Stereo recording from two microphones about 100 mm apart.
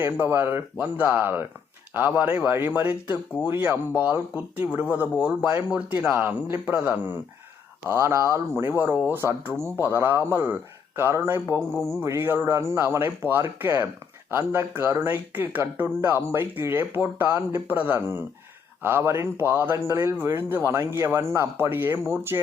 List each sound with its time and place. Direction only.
0.0 s speech: 20° right (ahead or behind)
11.6 s speech: 5° left (ahead or behind)
11.9 s speech: 25° right (ahead or behind)